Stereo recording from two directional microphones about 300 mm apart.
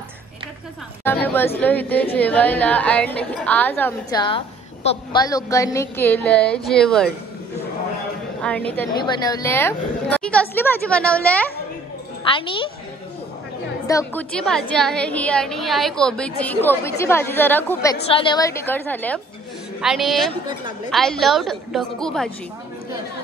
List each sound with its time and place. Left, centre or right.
1.0 s a woman's voice: centre
8.4 s a woman's voice: centre
12.3 s a woman's voice: centre
13.8 s a woman's voice: centre